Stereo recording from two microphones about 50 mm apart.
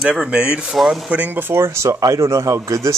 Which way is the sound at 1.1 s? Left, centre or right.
Right.